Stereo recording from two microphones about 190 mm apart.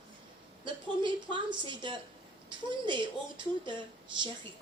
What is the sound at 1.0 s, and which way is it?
A woman's voice, 25° right (ahead or behind).